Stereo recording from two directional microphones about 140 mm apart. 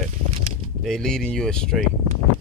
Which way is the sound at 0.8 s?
5° left (ahead or behind).